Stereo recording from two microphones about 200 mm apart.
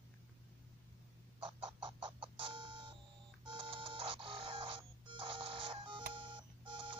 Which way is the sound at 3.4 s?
25° right (ahead or behind).